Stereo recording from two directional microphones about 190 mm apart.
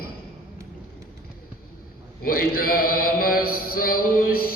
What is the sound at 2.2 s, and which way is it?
Mantra, 50° left (ahead or behind).